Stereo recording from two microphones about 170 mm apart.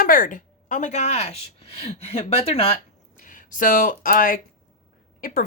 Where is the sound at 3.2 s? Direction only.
55° left (ahead or behind).